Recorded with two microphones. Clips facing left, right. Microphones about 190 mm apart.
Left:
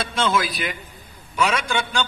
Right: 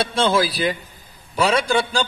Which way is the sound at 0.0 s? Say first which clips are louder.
Right 4 dB; 30° right (ahead or behind).